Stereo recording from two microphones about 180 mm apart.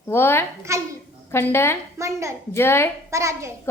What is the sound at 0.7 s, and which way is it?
Speech, 15° right (ahead or behind).